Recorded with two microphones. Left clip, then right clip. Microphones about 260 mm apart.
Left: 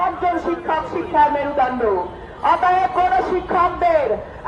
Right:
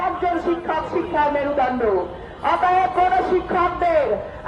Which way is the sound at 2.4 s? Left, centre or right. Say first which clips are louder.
Left 2 dB; centre.